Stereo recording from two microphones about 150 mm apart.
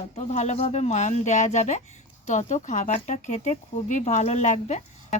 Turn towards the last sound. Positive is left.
turn(degrees=50)  # may be behind; listen again after turning